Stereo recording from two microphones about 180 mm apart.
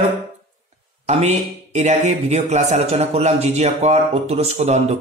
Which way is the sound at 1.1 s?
40° right (ahead or behind).